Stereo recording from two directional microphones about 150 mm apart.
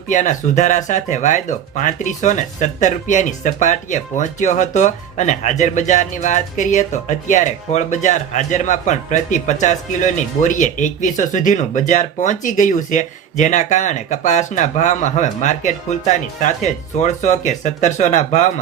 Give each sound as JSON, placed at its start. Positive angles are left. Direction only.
{"t": 0.1, "sound": "speech", "side_deg": 55}